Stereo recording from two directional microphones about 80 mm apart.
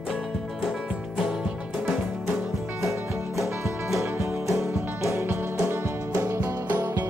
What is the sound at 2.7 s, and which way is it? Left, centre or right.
Music, right.